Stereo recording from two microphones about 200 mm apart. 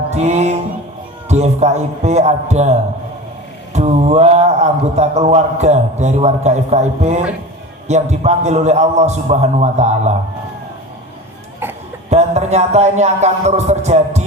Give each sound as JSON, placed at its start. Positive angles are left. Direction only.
{"t": 0.1, "sound": "music", "side_deg": -35}
{"t": 1.3, "sound": "a man's voice", "side_deg": -35}
{"t": 11.6, "sound": "cough", "side_deg": -10}
{"t": 12.1, "sound": "a man's voice", "side_deg": -35}